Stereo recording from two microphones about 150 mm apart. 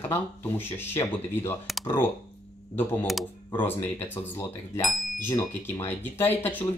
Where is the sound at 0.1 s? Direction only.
15° left (ahead or behind).